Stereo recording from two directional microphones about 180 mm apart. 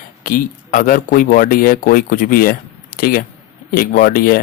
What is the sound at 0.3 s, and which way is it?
Speech, 50° left (ahead or behind).